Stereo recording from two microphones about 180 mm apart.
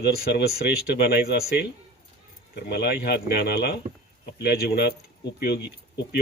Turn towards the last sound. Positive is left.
turn(degrees=65)  # may be behind; listen again after turning